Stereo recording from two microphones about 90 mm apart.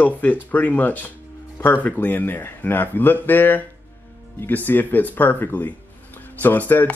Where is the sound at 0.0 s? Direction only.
20° left (ahead or behind).